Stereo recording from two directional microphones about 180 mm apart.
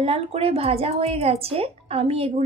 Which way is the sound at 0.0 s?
35° right (ahead or behind).